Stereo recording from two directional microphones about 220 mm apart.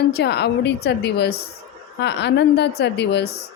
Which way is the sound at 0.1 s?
50° left (ahead or behind).